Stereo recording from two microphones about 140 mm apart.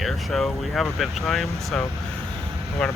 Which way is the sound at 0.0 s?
Centre (ahead or behind).